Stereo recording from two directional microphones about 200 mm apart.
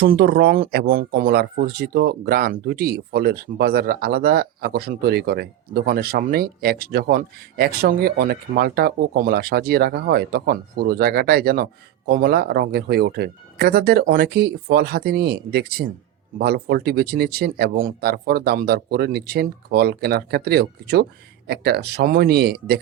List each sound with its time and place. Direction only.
0.0 s speech: 55° right (ahead or behind)